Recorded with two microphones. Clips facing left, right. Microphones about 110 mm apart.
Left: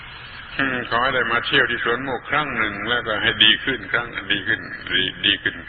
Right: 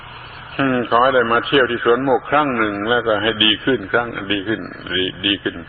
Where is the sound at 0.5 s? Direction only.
35° right (ahead or behind).